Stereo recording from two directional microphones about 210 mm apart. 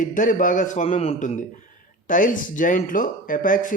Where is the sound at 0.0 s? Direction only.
40° left (ahead or behind).